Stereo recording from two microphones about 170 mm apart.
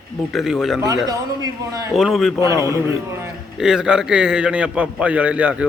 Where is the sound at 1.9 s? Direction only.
Centre (ahead or behind).